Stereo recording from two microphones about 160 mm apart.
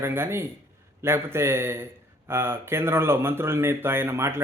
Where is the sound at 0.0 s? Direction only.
15° right (ahead or behind).